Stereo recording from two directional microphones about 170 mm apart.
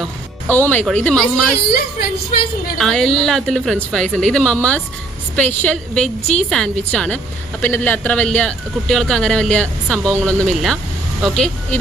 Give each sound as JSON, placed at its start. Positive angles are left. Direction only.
{"t": 0.0, "sound": "music", "side_deg": 10}
{"t": 1.0, "sound": "a woman's voice", "side_deg": 5}
{"t": 1.5, "sound": "a woman's voice", "side_deg": 65}
{"t": 2.7, "sound": "a woman's voice", "side_deg": 5}